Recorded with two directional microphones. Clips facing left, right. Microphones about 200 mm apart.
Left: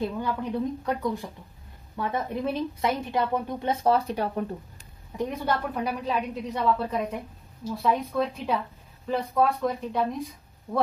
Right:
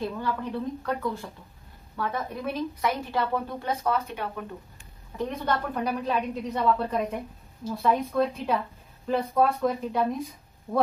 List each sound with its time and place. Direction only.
0.2 s a woman's voice: 15° left (ahead or behind)
3.8 s speech: 35° left (ahead or behind)
5.4 s a woman's voice: 5° left (ahead or behind)